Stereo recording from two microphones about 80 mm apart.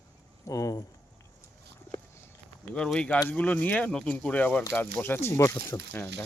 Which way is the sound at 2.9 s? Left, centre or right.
Centre.